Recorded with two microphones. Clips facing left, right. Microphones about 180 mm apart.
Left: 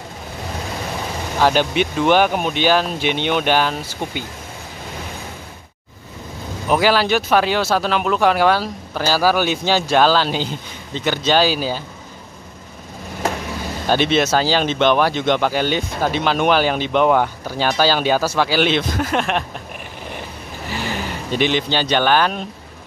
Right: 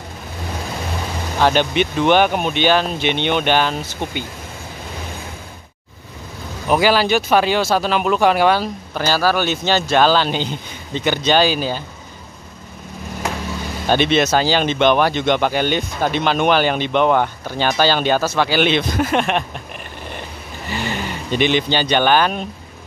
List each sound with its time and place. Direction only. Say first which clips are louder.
1.4 s speech: even; 5° left (ahead or behind)
6.7 s speech: right 1 dB; centre (ahead or behind)
13.8 s speech: right 1 dB; 5° left (ahead or behind)
20.6 s vehicle: right 1 dB; 5° left (ahead or behind)
21.5 s speech: right 2 dB; 60° right (ahead or behind)
21.7 s speech: even; centre (ahead or behind)